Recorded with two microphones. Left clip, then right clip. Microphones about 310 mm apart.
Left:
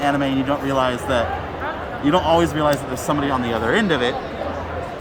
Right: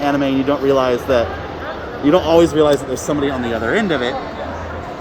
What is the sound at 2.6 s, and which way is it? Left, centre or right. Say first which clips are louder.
Speech: right 5 dB; left.